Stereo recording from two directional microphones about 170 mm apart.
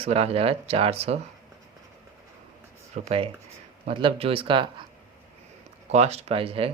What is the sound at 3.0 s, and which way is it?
Speech, 35° right (ahead or behind).